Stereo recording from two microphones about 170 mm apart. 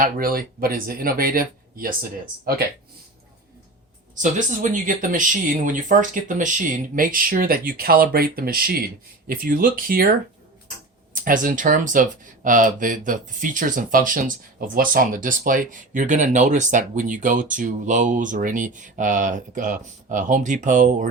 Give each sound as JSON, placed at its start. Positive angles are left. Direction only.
{"t": 0.0, "sound": "speech", "side_deg": -55}
{"t": 4.1, "sound": "speech", "side_deg": -50}